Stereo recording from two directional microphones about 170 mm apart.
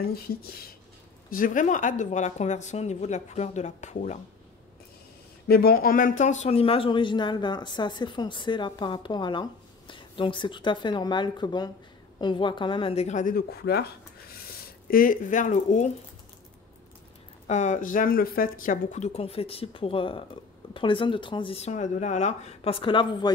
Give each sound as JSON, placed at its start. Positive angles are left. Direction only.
{"t": 1.3, "sound": "a woman's voice", "side_deg": 50}
{"t": 5.5, "sound": "speech", "side_deg": 65}
{"t": 14.9, "sound": "a woman's voice", "side_deg": 55}
{"t": 17.5, "sound": "a woman's voice", "side_deg": 45}